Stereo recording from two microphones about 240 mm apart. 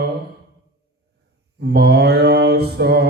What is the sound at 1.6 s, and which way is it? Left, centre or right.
Mantra, right.